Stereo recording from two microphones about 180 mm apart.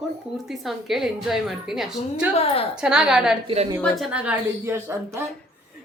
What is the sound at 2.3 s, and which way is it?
Speech, 30° left (ahead or behind).